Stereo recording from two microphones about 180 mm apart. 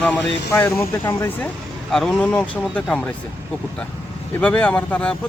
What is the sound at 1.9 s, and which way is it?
Speech, 5° left (ahead or behind).